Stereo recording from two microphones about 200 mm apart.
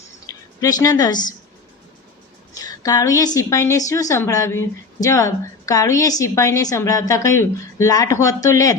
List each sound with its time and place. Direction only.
0.3 s speech: 15° left (ahead or behind)
2.6 s a woman's voice: 20° left (ahead or behind)